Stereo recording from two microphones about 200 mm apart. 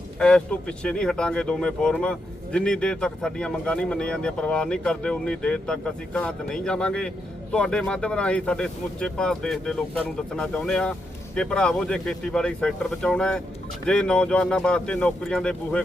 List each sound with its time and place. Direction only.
0.2 s speech: 5° left (ahead or behind)